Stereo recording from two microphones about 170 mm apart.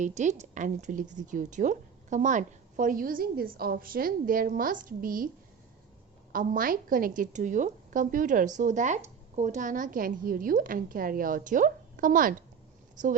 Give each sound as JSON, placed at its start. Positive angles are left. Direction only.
{"t": 0.0, "sound": "a woman's voice", "side_deg": -45}
{"t": 6.3, "sound": "a woman's voice", "side_deg": -55}